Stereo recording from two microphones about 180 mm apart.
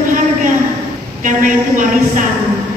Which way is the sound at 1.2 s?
45° right (ahead or behind).